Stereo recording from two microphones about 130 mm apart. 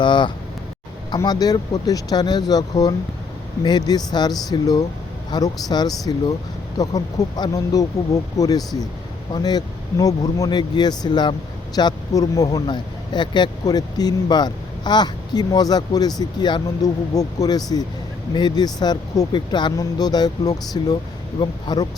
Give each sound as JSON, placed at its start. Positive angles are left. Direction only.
{"t": 0.0, "sound": "speech", "side_deg": 40}